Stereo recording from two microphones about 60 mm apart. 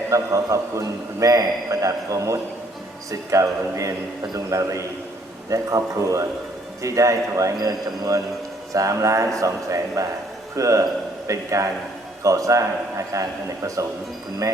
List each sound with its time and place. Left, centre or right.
0.1 s a man's voice: right
4.4 s speech: right
8.7 s a man's voice: right
14.4 s speech: right